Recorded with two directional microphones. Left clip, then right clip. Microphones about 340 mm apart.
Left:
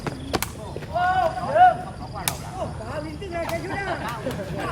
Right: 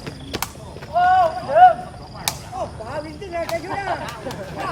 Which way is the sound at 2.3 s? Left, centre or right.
Centre.